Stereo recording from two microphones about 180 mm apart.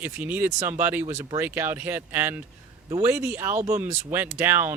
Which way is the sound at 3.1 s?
10° right (ahead or behind).